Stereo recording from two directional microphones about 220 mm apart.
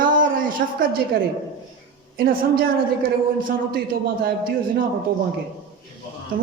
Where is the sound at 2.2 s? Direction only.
45° right (ahead or behind).